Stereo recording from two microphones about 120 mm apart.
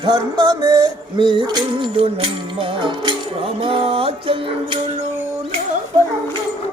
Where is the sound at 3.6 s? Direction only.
50° right (ahead or behind).